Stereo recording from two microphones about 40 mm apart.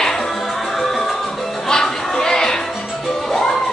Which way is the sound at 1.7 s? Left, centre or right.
Centre.